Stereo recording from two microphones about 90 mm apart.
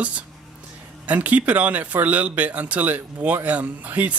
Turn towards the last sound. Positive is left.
turn(degrees=-15)  # may be behind; listen again after turning